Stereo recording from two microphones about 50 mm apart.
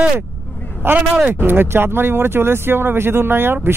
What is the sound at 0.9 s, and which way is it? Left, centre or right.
Speech, right.